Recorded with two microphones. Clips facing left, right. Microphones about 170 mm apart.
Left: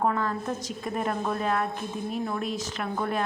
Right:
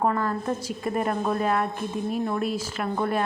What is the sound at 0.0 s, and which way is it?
A woman's voice, 5° right (ahead or behind).